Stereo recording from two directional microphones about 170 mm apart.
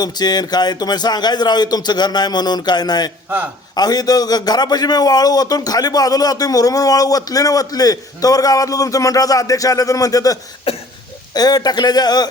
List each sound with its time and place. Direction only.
0.0 s a man's voice: 25° left (ahead or behind)
3.2 s a man's voice: 10° right (ahead or behind)
3.8 s a man's voice: 25° left (ahead or behind)
10.7 s cough: 35° left (ahead or behind)
11.3 s a man's voice: 25° left (ahead or behind)